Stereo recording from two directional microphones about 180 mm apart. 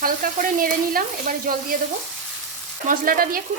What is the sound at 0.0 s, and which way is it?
A woman's voice, 50° right (ahead or behind).